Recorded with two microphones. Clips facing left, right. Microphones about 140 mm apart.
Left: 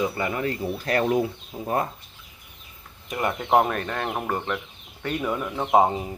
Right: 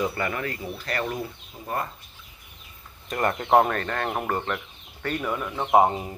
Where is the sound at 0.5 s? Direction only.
45° left (ahead or behind).